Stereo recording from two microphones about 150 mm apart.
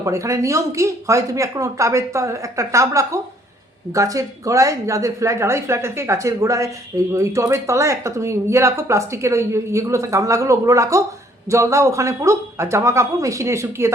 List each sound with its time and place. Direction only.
0.0 s a woman's voice: 20° right (ahead or behind)